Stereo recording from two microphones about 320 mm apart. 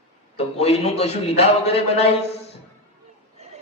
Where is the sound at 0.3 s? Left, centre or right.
Centre.